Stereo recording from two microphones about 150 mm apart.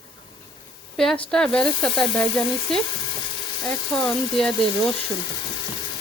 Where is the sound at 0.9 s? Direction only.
5° left (ahead or behind).